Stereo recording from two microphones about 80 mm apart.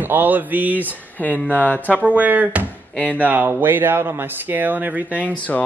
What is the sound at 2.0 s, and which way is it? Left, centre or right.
Speech, centre.